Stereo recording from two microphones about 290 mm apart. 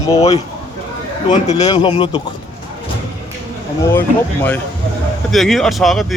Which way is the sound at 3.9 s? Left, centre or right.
Centre.